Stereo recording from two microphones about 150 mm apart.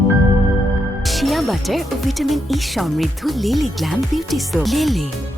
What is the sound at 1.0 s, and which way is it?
Speech, centre (ahead or behind).